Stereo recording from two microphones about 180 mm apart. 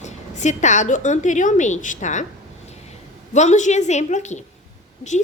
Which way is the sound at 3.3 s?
40° left (ahead or behind).